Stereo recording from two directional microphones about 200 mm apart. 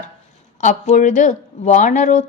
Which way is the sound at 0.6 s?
40° left (ahead or behind).